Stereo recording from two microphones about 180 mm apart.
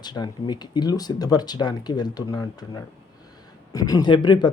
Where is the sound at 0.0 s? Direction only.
25° left (ahead or behind).